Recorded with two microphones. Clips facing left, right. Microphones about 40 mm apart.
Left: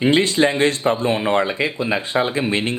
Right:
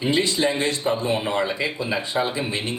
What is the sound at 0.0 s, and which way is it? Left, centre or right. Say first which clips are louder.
Speech: left 5 dB; left.